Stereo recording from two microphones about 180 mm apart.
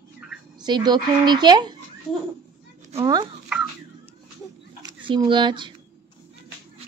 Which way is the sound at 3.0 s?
20° right (ahead or behind).